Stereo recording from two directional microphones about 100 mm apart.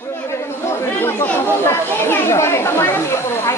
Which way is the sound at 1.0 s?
25° left (ahead or behind).